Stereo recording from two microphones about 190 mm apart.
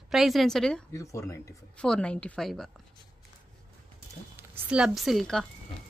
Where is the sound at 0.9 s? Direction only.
15° left (ahead or behind).